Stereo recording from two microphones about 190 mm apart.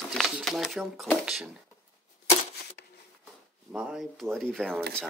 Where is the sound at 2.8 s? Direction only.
60° left (ahead or behind).